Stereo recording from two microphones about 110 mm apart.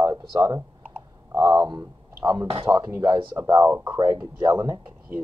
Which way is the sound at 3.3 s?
25° right (ahead or behind).